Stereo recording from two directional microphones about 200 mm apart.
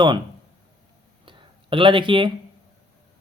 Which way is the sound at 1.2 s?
25° right (ahead or behind).